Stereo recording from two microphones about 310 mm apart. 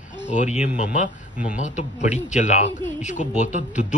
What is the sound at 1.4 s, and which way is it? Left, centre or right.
Speech, left.